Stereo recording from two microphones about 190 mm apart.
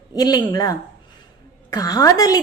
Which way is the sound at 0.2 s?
20° left (ahead or behind).